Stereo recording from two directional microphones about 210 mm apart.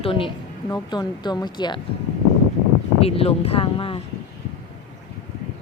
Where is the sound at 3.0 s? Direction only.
30° left (ahead or behind).